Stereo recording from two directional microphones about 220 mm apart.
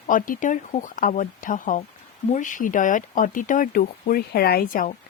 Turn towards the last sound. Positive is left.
turn(degrees=40)  # may be behind; listen again after turning